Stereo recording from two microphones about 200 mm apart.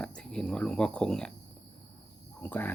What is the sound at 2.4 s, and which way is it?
Speech, 10° left (ahead or behind).